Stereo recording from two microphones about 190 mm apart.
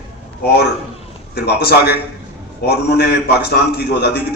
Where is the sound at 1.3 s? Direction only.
55° left (ahead or behind).